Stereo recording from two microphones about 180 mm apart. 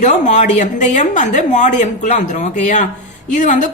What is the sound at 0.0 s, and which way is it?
A woman's voice, 40° left (ahead or behind).